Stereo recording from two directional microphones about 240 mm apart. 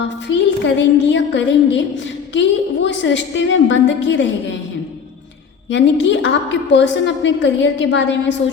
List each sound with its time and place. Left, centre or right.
0.3 s a woman's voice: left
5.7 s a woman's voice: left